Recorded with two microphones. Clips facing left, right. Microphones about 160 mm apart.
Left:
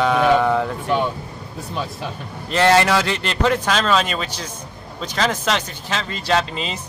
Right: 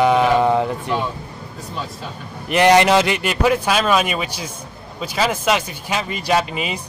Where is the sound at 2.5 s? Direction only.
15° right (ahead or behind).